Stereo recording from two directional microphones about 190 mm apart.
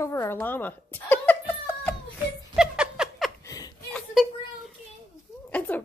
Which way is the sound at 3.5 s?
20° left (ahead or behind).